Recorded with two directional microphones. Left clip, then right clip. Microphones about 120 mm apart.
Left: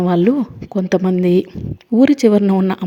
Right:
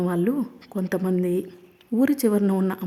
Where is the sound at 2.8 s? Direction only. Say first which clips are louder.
Left 8 dB; 5° left (ahead or behind).